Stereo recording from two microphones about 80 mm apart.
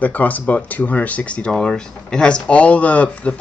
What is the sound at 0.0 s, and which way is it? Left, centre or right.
Speech, centre.